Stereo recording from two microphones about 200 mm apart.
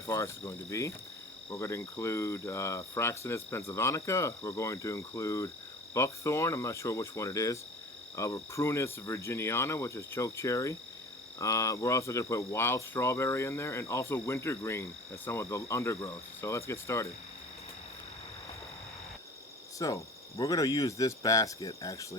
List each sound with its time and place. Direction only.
0.1 s speech: 15° left (ahead or behind)
19.8 s speech: 15° left (ahead or behind)